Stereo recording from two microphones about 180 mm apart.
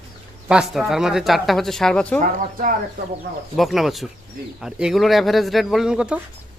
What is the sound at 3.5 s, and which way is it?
Speech, centre (ahead or behind).